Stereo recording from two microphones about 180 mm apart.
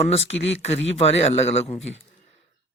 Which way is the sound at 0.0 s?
35° left (ahead or behind).